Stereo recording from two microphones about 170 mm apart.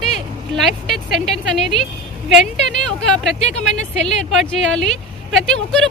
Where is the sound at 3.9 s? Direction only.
5° left (ahead or behind).